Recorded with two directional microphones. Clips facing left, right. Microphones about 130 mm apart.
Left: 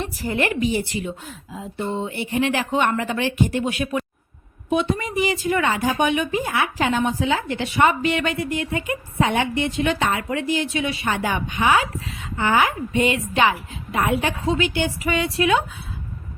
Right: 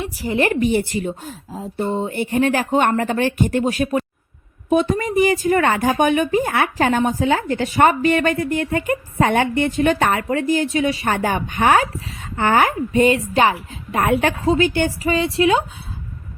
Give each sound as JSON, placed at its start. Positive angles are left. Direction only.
{"t": 0.3, "sound": "speech", "side_deg": -40}
{"t": 14.4, "sound": "a woman's voice", "side_deg": -40}
{"t": 15.0, "sound": "a woman's voice", "side_deg": -30}